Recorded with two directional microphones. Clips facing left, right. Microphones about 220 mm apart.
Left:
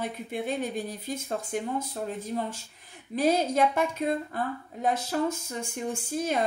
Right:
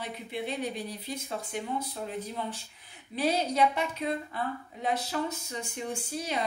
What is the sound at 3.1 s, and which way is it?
A woman's voice, 45° left (ahead or behind).